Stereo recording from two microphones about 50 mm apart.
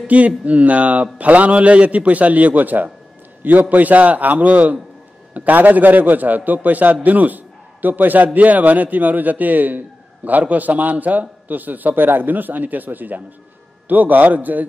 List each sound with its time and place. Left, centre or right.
0.0 s a man's voice: right